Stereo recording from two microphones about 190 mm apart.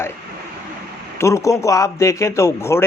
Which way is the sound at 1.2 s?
15° left (ahead or behind).